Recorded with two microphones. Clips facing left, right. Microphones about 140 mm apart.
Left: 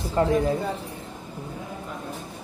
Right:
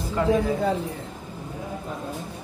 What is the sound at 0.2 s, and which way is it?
Speech, 35° left (ahead or behind).